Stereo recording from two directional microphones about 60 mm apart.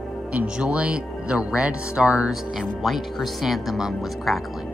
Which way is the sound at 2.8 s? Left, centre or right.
Centre.